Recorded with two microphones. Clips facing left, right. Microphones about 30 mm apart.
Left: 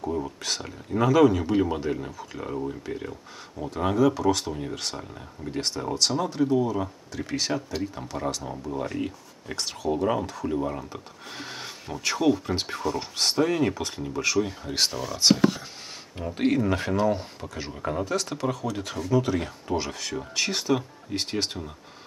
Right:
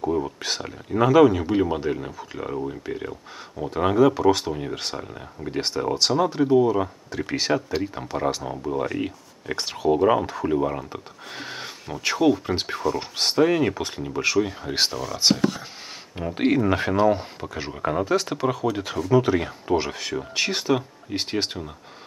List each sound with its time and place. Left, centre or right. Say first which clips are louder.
0.0 s a sound: right 5 dB; centre
0.6 s speech: right 4 dB; centre
14.9 s speech: left 3 dB; centre
16.2 s speech: right 3 dB; centre